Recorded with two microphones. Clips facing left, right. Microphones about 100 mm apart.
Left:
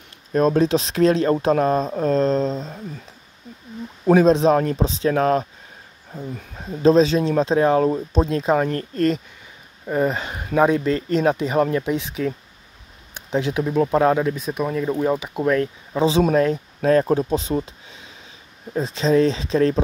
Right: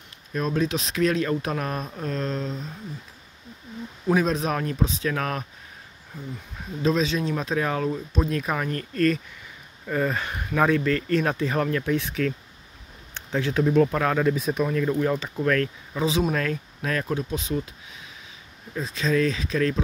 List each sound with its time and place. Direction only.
0.3 s speech: 40° left (ahead or behind)
4.0 s speech: 35° left (ahead or behind); by 12.4 s 20° left (ahead or behind)
13.1 s a sound: 15° left (ahead or behind)
13.8 s speech: 30° left (ahead or behind)
14.2 s speech: centre (ahead or behind)
14.6 s speech: 15° left (ahead or behind); by 17.6 s 35° left (ahead or behind)
18.7 s speech: 30° left (ahead or behind)